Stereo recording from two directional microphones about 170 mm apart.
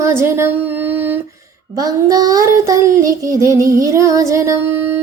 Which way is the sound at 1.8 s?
20° right (ahead or behind).